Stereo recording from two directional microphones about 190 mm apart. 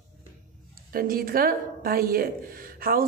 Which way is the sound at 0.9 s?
50° right (ahead or behind).